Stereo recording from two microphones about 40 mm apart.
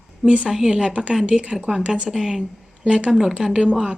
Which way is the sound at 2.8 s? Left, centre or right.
Right.